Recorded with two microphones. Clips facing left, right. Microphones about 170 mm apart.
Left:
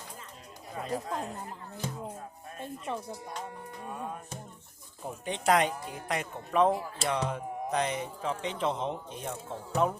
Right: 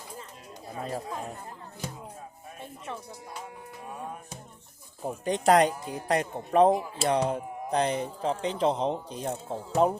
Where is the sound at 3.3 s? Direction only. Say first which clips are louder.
Left 1 dB; 5° right (ahead or behind).